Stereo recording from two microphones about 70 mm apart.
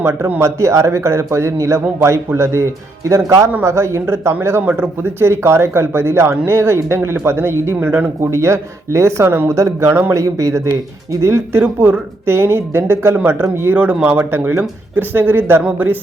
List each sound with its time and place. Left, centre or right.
0.0 s a man's voice: right
10.1 s a man's voice: right